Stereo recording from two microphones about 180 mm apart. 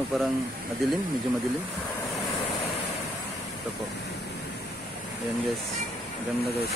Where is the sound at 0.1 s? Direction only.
Centre (ahead or behind).